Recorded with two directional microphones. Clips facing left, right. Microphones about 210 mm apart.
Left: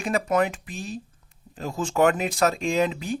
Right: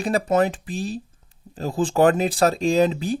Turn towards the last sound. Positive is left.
turn(degrees=-35)  # may be behind; listen again after turning